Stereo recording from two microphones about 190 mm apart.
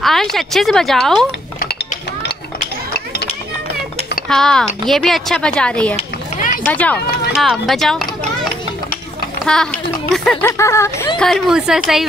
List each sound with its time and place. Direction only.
0.0 s speech: centre (ahead or behind)
4.3 s speech: 5° left (ahead or behind)
5.9 s run: 40° left (ahead or behind)
6.6 s speech: 10° left (ahead or behind)
9.4 s speech: 5° left (ahead or behind)
10.4 s speech: 15° left (ahead or behind)
11.1 s speech: centre (ahead or behind)